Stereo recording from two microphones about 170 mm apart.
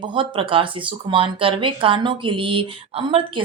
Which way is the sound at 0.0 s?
30° right (ahead or behind).